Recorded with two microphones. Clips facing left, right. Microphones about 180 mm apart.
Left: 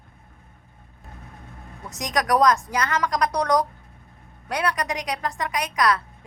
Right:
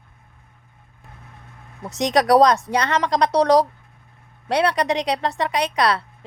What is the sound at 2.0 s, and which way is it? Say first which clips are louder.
A woman's voice: right 6 dB; 30° right (ahead or behind).